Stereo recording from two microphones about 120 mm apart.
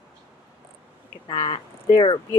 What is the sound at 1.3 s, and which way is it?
Speech, 45° left (ahead or behind).